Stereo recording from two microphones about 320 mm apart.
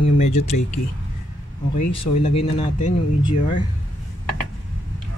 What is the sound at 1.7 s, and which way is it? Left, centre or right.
Speech, left.